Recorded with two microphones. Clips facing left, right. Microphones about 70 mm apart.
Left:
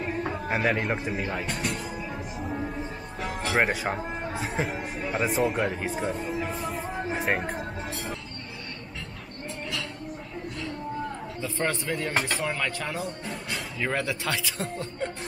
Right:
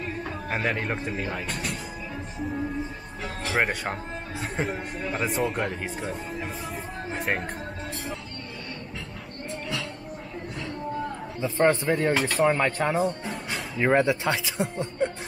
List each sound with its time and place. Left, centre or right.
0.0 s a sound: centre
0.5 s speech: centre
3.2 s speech: centre
11.4 s speech: right
13.0 s music: centre
13.7 s speech: right